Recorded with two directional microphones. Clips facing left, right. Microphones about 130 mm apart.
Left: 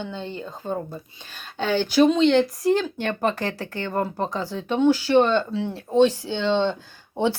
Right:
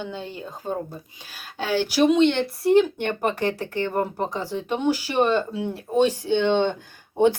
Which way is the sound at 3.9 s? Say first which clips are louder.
Left 4 dB; 15° right (ahead or behind).